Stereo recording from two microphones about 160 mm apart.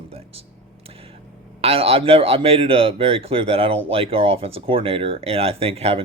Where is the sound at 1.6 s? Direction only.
40° right (ahead or behind).